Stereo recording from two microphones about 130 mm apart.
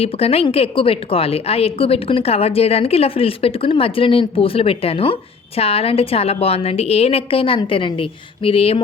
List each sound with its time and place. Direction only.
0.0 s a woman's voice: 50° left (ahead or behind)